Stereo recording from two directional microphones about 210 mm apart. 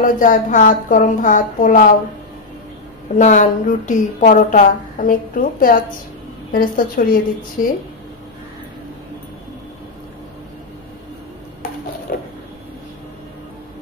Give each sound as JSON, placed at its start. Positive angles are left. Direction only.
{"t": 0.0, "sound": "a woman's voice", "side_deg": 40}
{"t": 3.2, "sound": "a woman's voice", "side_deg": 35}
{"t": 12.1, "sound": "a sound", "side_deg": 45}